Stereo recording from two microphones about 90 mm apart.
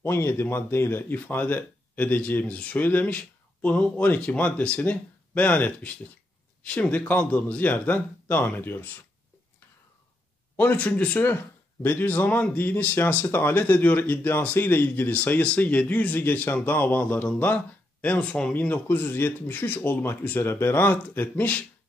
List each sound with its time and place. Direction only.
0.0 s speech: 25° left (ahead or behind)
10.5 s speech: 20° left (ahead or behind)